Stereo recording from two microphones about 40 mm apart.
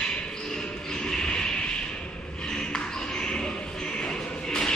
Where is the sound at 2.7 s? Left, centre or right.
Left.